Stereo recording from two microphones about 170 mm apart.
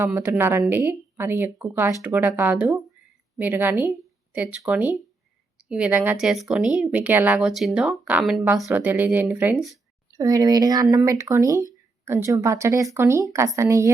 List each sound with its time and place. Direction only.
0.0 s speech: 15° right (ahead or behind)
10.2 s speech: 20° right (ahead or behind)